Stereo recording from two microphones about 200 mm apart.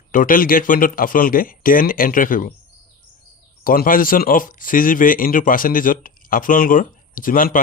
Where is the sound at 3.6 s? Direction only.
45° left (ahead or behind).